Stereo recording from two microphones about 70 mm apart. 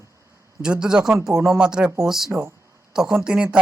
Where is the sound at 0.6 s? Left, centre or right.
Centre.